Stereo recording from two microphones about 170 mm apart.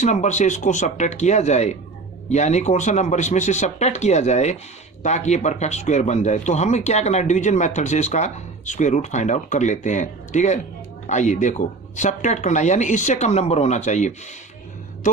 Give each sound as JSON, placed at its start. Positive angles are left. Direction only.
{"t": 0.0, "sound": "speech", "side_deg": 45}